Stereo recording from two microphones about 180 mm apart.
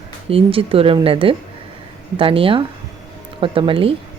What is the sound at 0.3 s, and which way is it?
A woman's voice, 30° right (ahead or behind).